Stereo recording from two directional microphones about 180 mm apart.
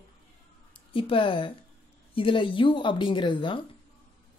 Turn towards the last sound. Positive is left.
turn(degrees=25)  # may be behind; listen again after turning